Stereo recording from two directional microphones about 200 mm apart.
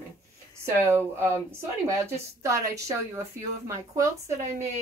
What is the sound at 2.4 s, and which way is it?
A woman's voice, 15° right (ahead or behind).